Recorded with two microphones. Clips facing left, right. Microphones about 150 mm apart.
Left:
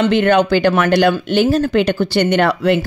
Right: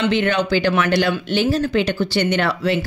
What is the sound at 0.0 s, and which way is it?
Speech, 50° left (ahead or behind).